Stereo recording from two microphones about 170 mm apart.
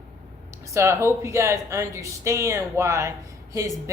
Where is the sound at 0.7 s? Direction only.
15° right (ahead or behind).